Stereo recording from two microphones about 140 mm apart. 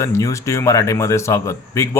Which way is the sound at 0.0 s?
20° left (ahead or behind).